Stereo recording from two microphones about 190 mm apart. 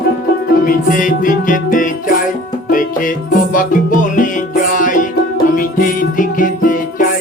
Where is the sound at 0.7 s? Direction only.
45° left (ahead or behind).